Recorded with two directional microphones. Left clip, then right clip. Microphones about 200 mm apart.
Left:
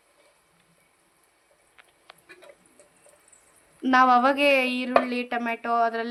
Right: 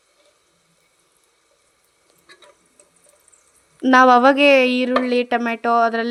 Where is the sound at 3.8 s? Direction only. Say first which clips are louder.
Right 7 dB; 45° right (ahead or behind).